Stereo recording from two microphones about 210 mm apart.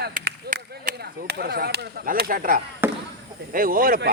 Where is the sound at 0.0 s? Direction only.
50° right (ahead or behind).